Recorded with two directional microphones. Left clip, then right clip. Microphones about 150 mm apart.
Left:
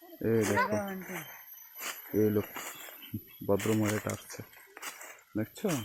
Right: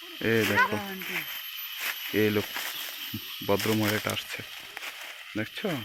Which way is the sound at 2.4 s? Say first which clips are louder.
Right 9 dB; 35° left (ahead or behind).